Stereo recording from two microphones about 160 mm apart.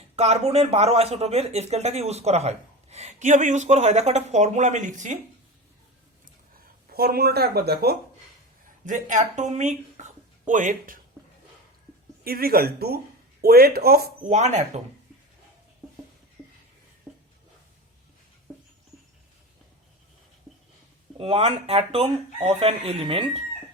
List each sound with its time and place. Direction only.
0.2 s speech: 40° right (ahead or behind)
6.9 s speech: 75° right (ahead or behind)
8.9 s speech: 50° right (ahead or behind)
12.2 s speech: 70° right (ahead or behind)
14.3 s speech: 45° right (ahead or behind)
17.1 s a sound: 5° right (ahead or behind)
21.2 s speech: 40° right (ahead or behind)